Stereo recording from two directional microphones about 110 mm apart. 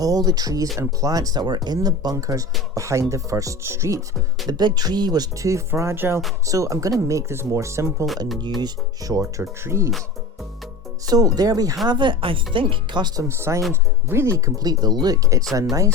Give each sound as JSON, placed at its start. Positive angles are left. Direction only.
{"t": 0.0, "sound": "speech", "side_deg": -35}
{"t": 4.4, "sound": "speech", "side_deg": -40}
{"t": 11.0, "sound": "speech", "side_deg": -35}
{"t": 11.9, "sound": "speech", "side_deg": -45}
{"t": 13.2, "sound": "speech", "side_deg": -25}